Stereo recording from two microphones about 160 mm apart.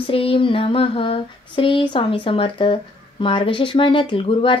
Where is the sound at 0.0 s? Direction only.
35° left (ahead or behind).